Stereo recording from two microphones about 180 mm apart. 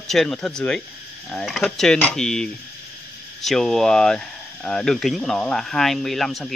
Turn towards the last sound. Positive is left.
turn(degrees=0)  # may be behind; listen again after turning